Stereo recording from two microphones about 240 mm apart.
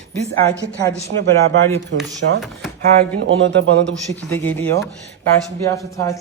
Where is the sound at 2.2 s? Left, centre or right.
Right.